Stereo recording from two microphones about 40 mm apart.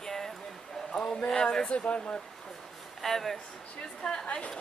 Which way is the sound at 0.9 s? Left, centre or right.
Left.